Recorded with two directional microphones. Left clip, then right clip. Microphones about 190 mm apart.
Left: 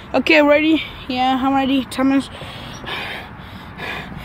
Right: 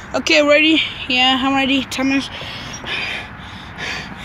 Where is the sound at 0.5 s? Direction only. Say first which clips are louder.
Right 2 dB; 15° left (ahead or behind).